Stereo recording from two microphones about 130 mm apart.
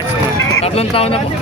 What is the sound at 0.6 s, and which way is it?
Speech, 50° left (ahead or behind).